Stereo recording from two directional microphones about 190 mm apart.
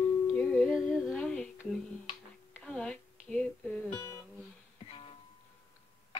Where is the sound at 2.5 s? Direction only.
5° left (ahead or behind).